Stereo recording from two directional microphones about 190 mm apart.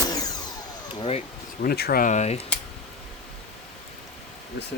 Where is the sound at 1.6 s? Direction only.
55° left (ahead or behind); by 2.4 s 35° left (ahead or behind).